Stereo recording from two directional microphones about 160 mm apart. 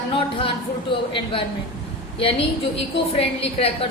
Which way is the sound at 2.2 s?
35° left (ahead or behind).